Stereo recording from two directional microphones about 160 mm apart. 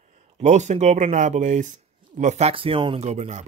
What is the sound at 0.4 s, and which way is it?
Speech, 45° right (ahead or behind).